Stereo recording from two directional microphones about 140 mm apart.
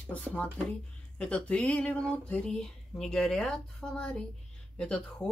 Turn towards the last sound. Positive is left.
turn(degrees=5)  # may be behind; listen again after turning